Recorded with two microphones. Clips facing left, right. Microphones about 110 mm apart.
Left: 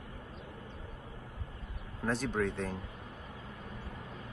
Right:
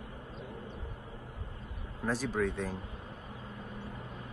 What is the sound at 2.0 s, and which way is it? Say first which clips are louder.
Speech: even; centre (ahead or behind).